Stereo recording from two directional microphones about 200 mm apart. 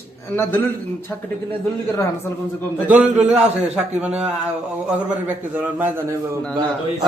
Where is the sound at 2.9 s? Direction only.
5° right (ahead or behind).